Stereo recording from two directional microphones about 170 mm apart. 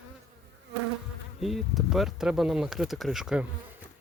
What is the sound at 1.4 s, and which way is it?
Speech, centre (ahead or behind).